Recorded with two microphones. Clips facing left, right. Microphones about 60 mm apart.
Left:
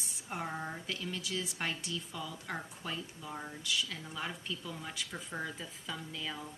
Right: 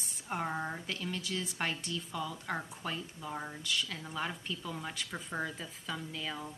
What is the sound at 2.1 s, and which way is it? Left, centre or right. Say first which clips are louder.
Speech: right 4 dB; centre.